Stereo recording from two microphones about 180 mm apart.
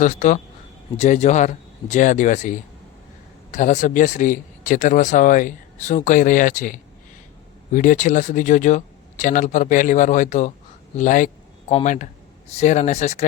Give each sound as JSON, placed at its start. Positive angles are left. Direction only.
{"t": 0.0, "sound": "speech", "side_deg": 45}